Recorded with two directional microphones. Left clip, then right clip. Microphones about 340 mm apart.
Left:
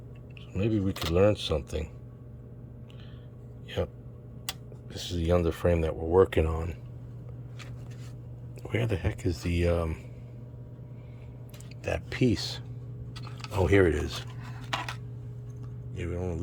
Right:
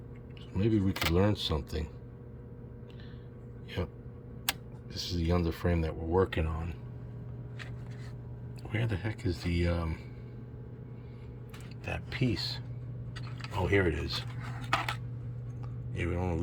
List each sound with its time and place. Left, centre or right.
0.5 s speech: centre
4.9 s speech: centre
8.6 s speech: centre
11.9 s speech: centre
13.7 s speech: centre
16.0 s speech: centre